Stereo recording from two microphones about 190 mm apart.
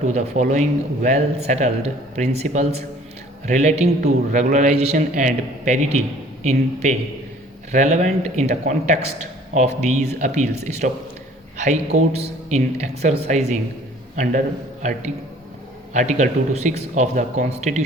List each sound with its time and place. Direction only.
0.1 s speech: 40° right (ahead or behind)